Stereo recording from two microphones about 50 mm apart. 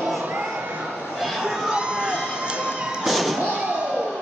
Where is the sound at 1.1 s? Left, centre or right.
Centre; by 3.0 s right.